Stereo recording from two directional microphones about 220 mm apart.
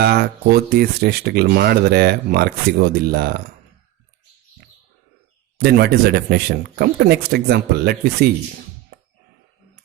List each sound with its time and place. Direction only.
0.0 s speech: 45° right (ahead or behind)
5.5 s speech: 50° right (ahead or behind)